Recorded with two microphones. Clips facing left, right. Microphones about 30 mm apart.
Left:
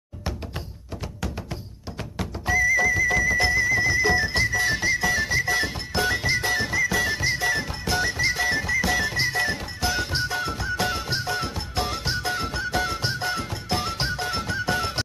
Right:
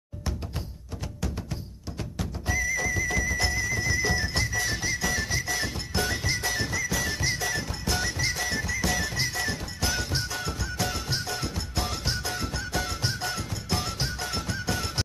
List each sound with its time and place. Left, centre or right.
2.4 s music: centre; by 9.6 s left
9.8 s music: centre
10.1 s music: left